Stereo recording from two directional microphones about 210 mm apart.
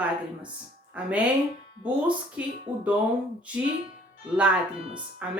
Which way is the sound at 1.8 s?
5° right (ahead or behind).